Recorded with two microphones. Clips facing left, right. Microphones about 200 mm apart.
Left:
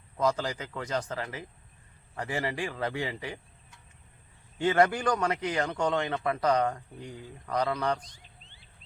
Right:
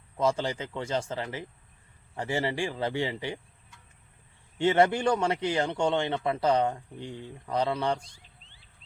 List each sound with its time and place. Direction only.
0.2 s a man's voice: 25° right (ahead or behind)
4.5 s a man's voice: 25° right (ahead or behind)